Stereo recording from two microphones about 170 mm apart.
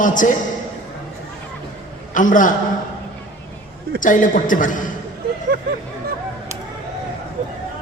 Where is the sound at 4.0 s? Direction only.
50° left (ahead or behind).